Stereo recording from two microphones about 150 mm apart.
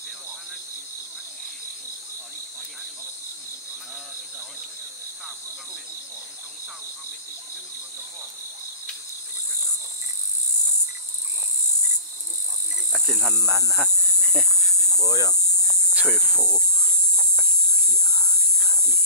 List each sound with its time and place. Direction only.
12.9 s cricket: centre (ahead or behind)
15.0 s hum: 25° left (ahead or behind)
15.9 s a sound: 10° right (ahead or behind)
16.2 s hum: 5° left (ahead or behind)
18.1 s whispering: 5° left (ahead or behind)